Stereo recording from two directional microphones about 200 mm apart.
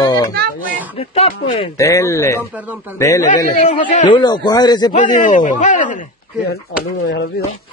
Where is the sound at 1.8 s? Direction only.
15° left (ahead or behind).